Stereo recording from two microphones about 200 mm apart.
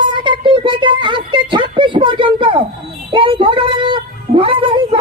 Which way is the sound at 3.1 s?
25° right (ahead or behind).